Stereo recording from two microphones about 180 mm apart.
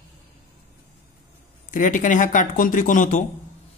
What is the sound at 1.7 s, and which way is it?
Speech, 45° left (ahead or behind).